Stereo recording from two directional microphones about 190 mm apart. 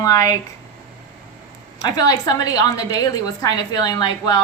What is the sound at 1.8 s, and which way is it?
A woman's voice, 20° left (ahead or behind).